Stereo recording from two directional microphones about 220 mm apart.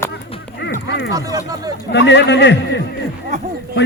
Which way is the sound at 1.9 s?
50° left (ahead or behind).